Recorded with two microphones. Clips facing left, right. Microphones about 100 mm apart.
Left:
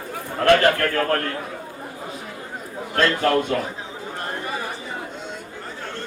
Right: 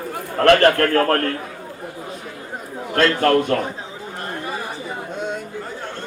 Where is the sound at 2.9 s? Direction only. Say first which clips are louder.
Right 3 dB; 60° right (ahead or behind).